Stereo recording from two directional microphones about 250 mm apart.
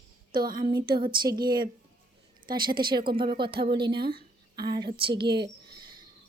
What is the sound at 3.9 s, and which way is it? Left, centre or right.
Speech, right.